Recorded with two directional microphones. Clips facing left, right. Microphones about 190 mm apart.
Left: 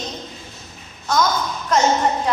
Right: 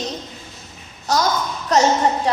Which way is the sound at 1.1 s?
40° right (ahead or behind).